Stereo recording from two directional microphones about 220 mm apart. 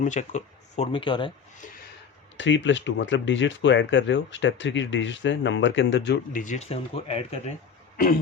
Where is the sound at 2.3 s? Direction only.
55° left (ahead or behind).